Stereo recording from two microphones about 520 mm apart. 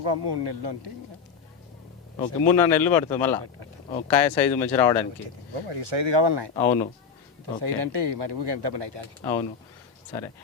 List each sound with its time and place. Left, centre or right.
0.0 s speech: right
2.1 s speech: centre
5.2 s speech: right
6.5 s speech: centre
7.6 s speech: right